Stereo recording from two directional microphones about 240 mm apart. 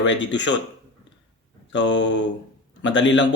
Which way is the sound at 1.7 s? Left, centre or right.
Left.